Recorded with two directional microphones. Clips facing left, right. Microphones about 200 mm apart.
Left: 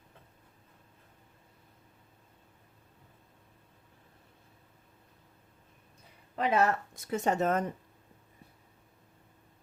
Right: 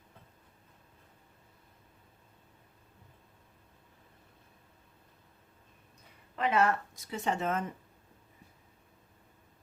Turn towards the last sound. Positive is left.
turn(degrees=40)  # may be behind; listen again after turning